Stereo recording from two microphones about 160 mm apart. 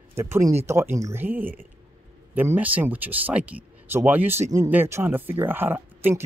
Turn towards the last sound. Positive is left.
turn(degrees=-15)  # may be behind; listen again after turning